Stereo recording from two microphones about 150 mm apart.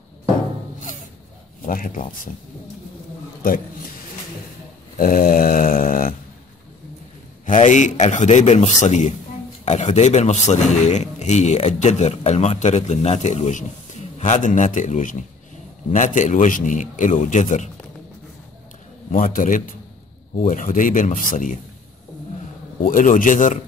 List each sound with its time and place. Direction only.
1.6 s a man's voice: 65° left (ahead or behind)
3.4 s a man's voice: 70° left (ahead or behind)
4.9 s a sound: 70° left (ahead or behind)
7.4 s a man's voice: 55° left (ahead or behind)
19.1 s a man's voice: 60° left (ahead or behind)
22.8 s a man's voice: 65° left (ahead or behind)